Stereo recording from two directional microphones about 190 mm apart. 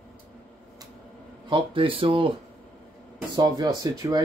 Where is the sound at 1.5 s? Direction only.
25° right (ahead or behind).